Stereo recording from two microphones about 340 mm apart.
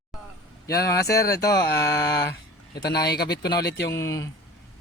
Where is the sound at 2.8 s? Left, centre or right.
Left.